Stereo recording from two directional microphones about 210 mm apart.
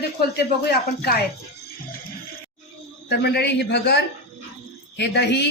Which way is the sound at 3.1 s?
50° left (ahead or behind).